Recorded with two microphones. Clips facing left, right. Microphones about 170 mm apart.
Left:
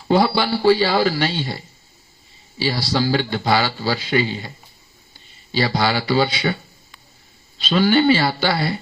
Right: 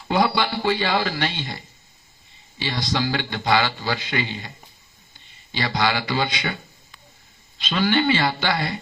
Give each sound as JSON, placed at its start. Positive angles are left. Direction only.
{"t": 0.1, "sound": "a man's voice", "side_deg": 30}
{"t": 5.5, "sound": "a man's voice", "side_deg": 30}
{"t": 7.6, "sound": "a man's voice", "side_deg": 30}